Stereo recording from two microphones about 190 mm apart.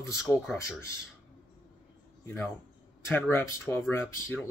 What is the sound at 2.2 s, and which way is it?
Speech, 15° left (ahead or behind).